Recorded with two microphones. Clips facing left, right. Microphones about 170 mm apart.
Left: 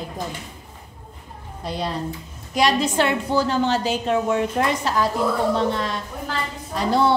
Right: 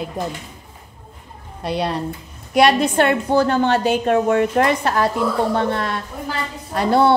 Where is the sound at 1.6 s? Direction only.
70° right (ahead or behind).